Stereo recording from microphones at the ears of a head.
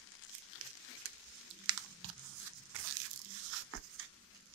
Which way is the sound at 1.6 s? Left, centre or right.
Right.